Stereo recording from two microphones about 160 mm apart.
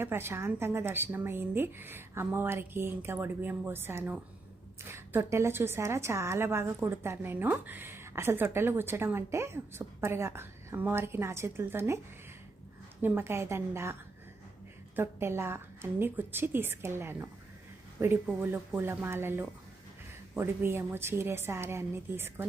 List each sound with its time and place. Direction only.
0.0 s a woman's voice: 15° right (ahead or behind)
13.0 s a woman's voice: 10° right (ahead or behind)
14.9 s a woman's voice: 15° right (ahead or behind)